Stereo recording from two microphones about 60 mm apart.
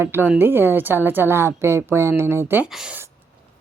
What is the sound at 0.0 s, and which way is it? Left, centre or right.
A woman's voice, right.